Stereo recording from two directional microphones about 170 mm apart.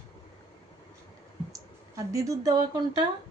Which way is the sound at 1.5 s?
20° right (ahead or behind).